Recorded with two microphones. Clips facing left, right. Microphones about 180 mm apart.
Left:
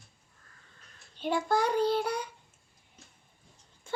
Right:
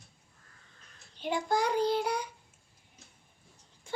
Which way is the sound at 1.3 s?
15° right (ahead or behind).